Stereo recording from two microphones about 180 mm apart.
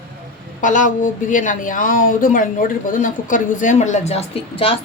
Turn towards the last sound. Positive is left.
turn(degrees=30)  # may be behind; listen again after turning